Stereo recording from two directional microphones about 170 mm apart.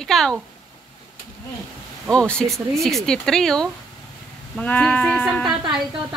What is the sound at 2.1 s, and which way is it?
Speech, 5° left (ahead or behind).